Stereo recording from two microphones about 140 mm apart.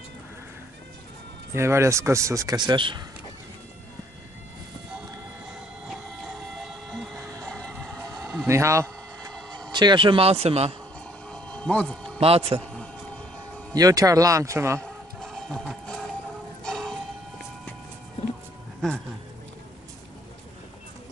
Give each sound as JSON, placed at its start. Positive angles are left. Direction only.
{"t": 1.5, "sound": "speech", "side_deg": -20}
{"t": 5.9, "sound": "train", "side_deg": -5}
{"t": 7.2, "sound": "music", "side_deg": -15}
{"t": 7.4, "sound": "music", "side_deg": 5}
{"t": 8.5, "sound": "a sound", "side_deg": -20}
{"t": 9.7, "sound": "a man's voice", "side_deg": -30}
{"t": 11.2, "sound": "music", "side_deg": 5}
{"t": 12.2, "sound": "a man's voice", "side_deg": -45}
{"t": 13.7, "sound": "speech", "side_deg": -25}
{"t": 14.8, "sound": "music", "side_deg": 0}